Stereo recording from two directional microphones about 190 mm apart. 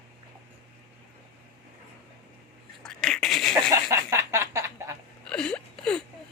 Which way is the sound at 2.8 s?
5° left (ahead or behind).